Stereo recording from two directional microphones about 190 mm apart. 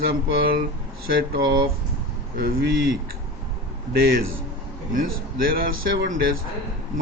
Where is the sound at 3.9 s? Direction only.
50° right (ahead or behind).